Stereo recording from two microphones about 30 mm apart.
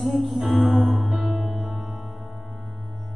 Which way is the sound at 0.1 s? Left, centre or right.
Centre.